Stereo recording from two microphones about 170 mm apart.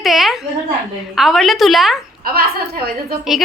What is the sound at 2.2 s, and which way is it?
Speech, 60° right (ahead or behind).